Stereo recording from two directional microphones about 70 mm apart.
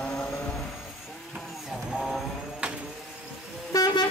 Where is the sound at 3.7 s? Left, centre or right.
Left.